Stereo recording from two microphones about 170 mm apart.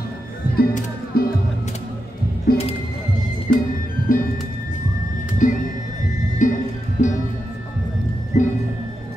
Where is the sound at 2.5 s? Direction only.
60° left (ahead or behind).